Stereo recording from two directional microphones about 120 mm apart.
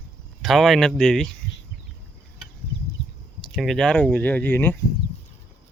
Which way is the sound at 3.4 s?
Centre (ahead or behind).